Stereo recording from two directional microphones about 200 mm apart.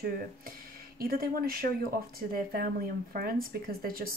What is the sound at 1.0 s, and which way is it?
Speech, 50° right (ahead or behind).